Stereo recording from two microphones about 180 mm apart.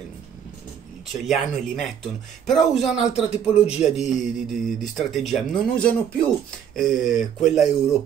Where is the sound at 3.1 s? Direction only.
35° left (ahead or behind).